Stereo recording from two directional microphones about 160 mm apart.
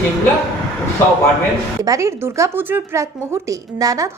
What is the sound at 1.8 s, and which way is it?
Speech, 20° right (ahead or behind).